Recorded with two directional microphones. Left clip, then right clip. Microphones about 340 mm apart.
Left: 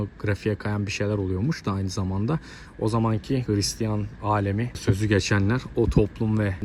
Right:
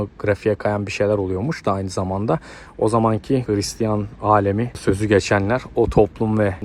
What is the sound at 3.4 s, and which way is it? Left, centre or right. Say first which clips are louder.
Speech: right 4 dB; centre.